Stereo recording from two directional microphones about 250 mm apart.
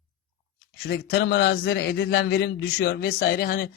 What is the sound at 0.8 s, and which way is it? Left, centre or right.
Speech, left.